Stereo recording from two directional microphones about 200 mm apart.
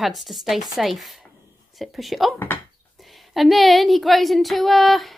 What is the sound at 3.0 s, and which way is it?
Speech, centre (ahead or behind).